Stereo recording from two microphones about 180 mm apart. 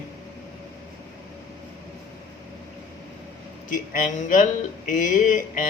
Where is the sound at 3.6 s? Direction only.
45° left (ahead or behind).